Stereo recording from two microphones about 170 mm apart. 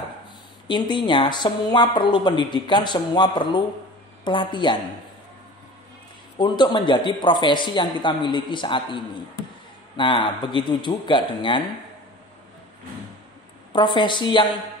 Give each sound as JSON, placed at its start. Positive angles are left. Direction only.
{"t": 0.7, "sound": "a woman's voice", "side_deg": 25}
{"t": 6.3, "sound": "a woman's voice", "side_deg": 25}
{"t": 13.7, "sound": "a woman's voice", "side_deg": 25}